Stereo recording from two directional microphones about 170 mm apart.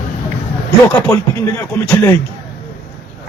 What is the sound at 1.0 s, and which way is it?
Speech, 20° left (ahead or behind).